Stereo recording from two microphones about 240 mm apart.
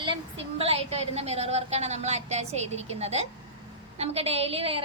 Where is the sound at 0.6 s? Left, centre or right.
Right.